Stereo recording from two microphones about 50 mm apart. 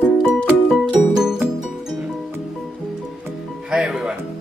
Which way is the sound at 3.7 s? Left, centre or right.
Centre.